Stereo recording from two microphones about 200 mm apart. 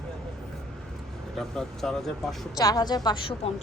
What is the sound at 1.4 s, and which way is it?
Speech, centre (ahead or behind).